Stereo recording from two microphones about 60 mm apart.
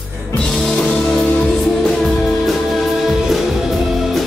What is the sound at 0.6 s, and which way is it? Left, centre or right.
Music, centre.